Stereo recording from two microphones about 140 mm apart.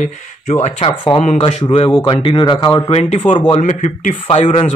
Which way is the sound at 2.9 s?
50° left (ahead or behind).